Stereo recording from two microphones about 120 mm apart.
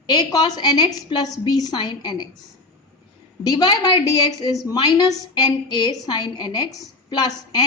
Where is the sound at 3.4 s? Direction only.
35° left (ahead or behind).